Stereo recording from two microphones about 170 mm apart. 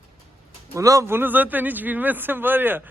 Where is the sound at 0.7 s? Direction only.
20° right (ahead or behind).